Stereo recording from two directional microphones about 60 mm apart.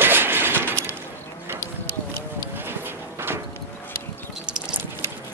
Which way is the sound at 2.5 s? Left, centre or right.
Right.